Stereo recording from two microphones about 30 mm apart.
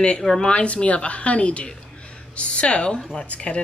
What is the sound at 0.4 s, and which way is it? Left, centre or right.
A woman's voice, left.